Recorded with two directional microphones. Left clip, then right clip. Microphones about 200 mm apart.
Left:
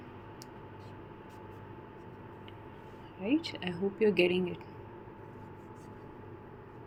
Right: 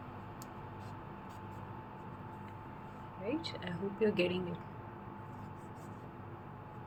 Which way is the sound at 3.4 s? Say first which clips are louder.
Left 5 dB; 40° left (ahead or behind).